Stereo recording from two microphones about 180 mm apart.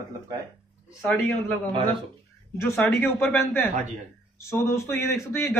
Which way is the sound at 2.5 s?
15° left (ahead or behind).